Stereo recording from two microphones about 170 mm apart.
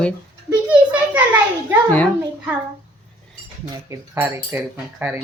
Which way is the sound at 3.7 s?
20° right (ahead or behind).